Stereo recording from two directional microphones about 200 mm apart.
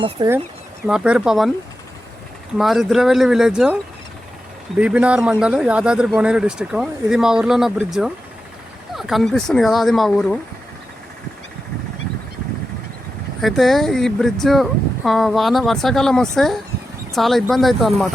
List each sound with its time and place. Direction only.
0.2 s speech: 20° right (ahead or behind)
0.9 s speech: 5° right (ahead or behind)
2.6 s speech: centre (ahead or behind)
4.8 s speech: 5° right (ahead or behind)
13.4 s speech: centre (ahead or behind)